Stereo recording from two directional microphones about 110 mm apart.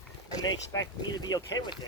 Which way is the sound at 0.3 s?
35° left (ahead or behind).